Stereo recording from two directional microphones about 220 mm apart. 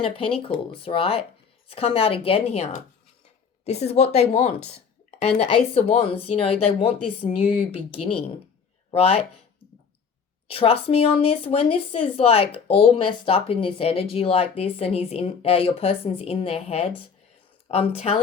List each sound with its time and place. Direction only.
0.0 s speech: 25° left (ahead or behind)
10.5 s speech: 25° left (ahead or behind)